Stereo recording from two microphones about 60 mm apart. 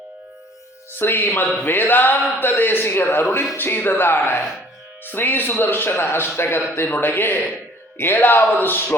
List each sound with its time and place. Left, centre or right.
0.9 s speech: left